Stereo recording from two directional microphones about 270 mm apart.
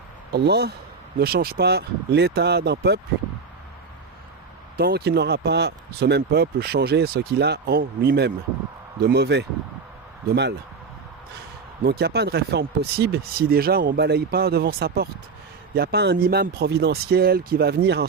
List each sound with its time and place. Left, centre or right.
0.3 s speech: right
4.8 s speech: right
11.8 s speech: right